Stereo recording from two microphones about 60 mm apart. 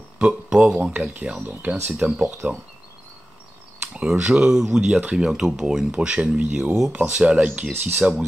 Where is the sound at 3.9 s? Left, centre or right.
Centre.